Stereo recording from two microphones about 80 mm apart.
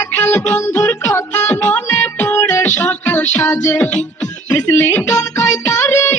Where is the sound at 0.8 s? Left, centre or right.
Left.